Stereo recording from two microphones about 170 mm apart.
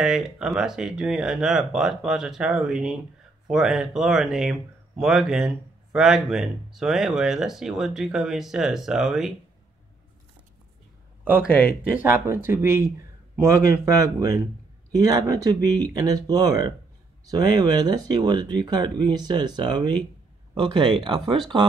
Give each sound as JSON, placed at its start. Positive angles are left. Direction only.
{"t": 0.0, "sound": "speech", "side_deg": -5}
{"t": 11.9, "sound": "speech", "side_deg": -10}